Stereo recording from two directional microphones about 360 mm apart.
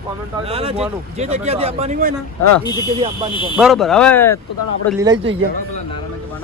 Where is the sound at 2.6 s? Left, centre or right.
Centre.